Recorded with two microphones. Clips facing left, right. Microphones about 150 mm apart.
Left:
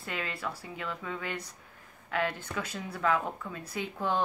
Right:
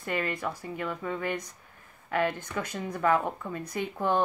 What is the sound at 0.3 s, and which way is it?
Speech, 15° right (ahead or behind).